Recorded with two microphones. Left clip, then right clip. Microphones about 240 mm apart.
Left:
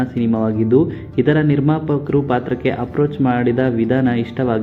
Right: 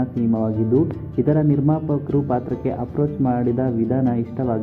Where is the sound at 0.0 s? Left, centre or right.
Left.